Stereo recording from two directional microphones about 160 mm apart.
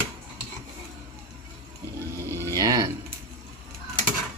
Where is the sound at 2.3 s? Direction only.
20° right (ahead or behind).